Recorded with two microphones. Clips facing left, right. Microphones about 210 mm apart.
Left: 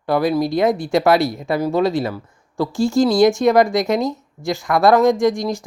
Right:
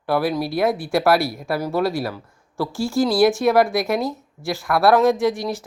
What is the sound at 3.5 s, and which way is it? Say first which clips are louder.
Speech: left 3 dB; 15° left (ahead or behind).